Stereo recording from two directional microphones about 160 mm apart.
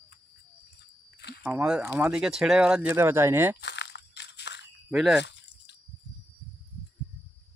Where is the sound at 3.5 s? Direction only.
90° left.